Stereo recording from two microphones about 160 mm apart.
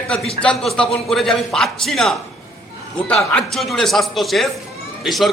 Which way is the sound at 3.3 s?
Centre (ahead or behind).